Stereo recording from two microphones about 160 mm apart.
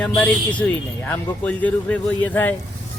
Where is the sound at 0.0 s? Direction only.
10° left (ahead or behind).